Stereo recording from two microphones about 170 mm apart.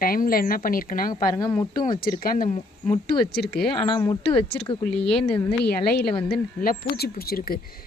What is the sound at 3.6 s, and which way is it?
Speech, 30° left (ahead or behind).